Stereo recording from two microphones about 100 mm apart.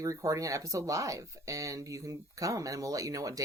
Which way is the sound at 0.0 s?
35° right (ahead or behind).